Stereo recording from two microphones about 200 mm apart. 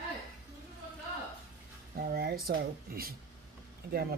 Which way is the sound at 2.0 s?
50° right (ahead or behind).